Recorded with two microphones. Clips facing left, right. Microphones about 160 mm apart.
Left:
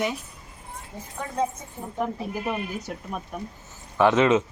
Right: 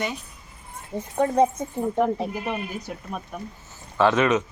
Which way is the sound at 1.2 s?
65° right (ahead or behind).